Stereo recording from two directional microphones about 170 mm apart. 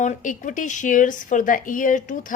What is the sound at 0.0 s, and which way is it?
A woman's voice, 45° left (ahead or behind).